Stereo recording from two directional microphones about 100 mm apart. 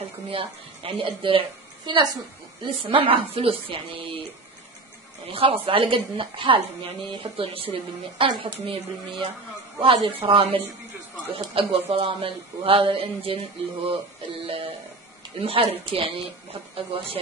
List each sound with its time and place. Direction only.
0.3 s speech: 65° right (ahead or behind)
1.9 s a woman's voice: 50° right (ahead or behind)
2.6 s speech: 60° right (ahead or behind)
5.3 s speech: 70° right (ahead or behind)
14.4 s speech: 70° right (ahead or behind)